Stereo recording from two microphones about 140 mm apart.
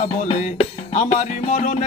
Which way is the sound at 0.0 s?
55° left (ahead or behind).